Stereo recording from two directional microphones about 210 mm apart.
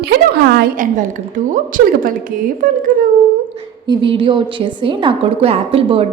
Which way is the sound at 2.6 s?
40° right (ahead or behind).